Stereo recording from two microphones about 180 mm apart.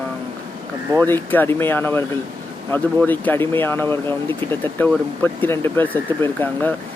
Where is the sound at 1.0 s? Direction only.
10° left (ahead or behind).